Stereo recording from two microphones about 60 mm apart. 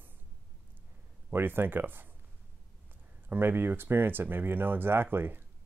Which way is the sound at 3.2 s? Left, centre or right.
Right.